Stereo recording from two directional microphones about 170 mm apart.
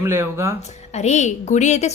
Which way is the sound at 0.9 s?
40° left (ahead or behind).